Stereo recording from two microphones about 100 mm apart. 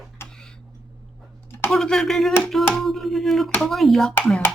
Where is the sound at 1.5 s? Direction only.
25° left (ahead or behind).